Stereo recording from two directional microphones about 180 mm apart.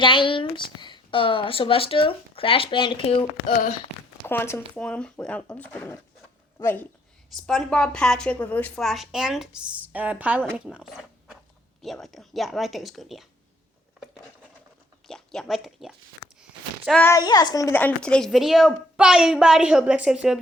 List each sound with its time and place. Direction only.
0.0 s speech: 25° left (ahead or behind)
3.4 s speech: 45° left (ahead or behind)
4.3 s a child's voice: 15° left (ahead or behind)
15.0 s speech: 5° left (ahead or behind)
17.0 s a child's voice: 15° left (ahead or behind); by 20.4 s 5° right (ahead or behind)